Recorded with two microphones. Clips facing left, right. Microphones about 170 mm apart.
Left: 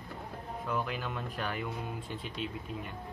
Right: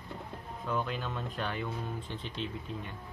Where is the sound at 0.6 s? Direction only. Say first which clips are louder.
Right 1 dB; 5° left (ahead or behind).